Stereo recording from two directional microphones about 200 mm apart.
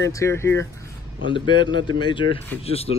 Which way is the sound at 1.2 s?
25° left (ahead or behind).